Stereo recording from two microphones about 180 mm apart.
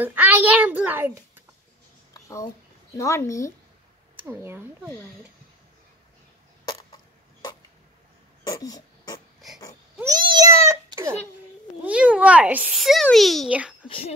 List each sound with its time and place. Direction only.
0.0 s a child's voice: 10° right (ahead or behind)
2.2 s speech: 15° left (ahead or behind)
4.3 s speech: 15° right (ahead or behind)
8.5 s speech: 20° left (ahead or behind)
10.2 s a sound: 20° right (ahead or behind)
11.8 s a child's voice: 5° right (ahead or behind)
13.8 s speech: 30° left (ahead or behind)